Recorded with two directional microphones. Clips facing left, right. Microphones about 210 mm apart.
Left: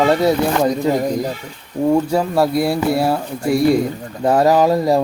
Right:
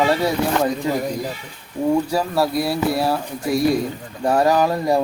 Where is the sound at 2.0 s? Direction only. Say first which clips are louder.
Left 4 dB; 25° left (ahead or behind).